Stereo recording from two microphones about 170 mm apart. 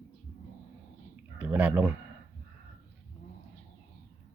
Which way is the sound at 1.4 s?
10° right (ahead or behind).